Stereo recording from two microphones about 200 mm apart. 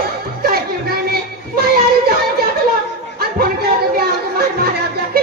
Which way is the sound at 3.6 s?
50° right (ahead or behind).